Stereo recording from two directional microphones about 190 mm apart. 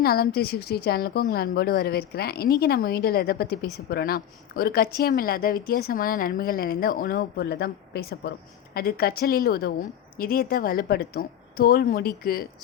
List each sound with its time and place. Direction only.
0.0 s a woman's voice: 55° left (ahead or behind)